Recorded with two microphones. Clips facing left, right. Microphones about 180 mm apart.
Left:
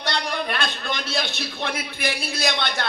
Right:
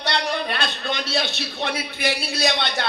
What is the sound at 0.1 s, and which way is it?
Speech, 50° left (ahead or behind).